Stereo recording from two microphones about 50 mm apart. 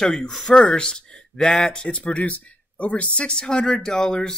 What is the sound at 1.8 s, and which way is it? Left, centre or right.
Speech, left.